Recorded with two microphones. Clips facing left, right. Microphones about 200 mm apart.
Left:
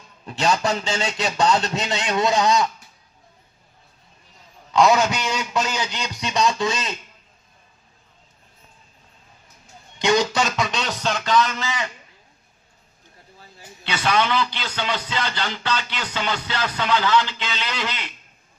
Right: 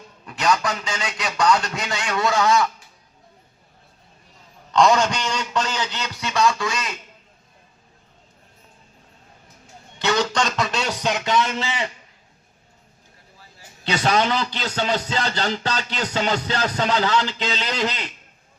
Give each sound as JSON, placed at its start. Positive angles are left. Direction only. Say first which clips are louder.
{"t": 0.3, "sound": "a man's voice", "louder": "left 1 dB", "side_deg": 25}
{"t": 4.7, "sound": "a man's voice", "louder": "even", "side_deg": 5}
{"t": 10.0, "sound": "speech", "louder": "left 2 dB", "side_deg": 10}
{"t": 13.8, "sound": "speech", "louder": "right 2 dB", "side_deg": -40}